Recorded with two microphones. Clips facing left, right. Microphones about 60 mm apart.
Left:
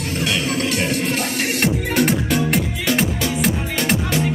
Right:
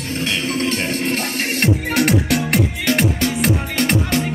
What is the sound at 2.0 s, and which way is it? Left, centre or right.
Music, right.